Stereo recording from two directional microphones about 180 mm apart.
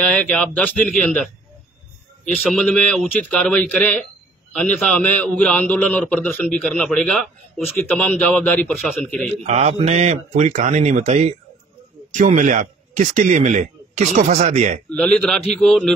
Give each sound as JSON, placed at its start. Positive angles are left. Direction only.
{"t": 0.0, "sound": "a man's voice", "side_deg": 5}
{"t": 2.4, "sound": "a man's voice", "side_deg": 5}
{"t": 9.4, "sound": "a man's voice", "side_deg": -35}
{"t": 14.9, "sound": "speech", "side_deg": 5}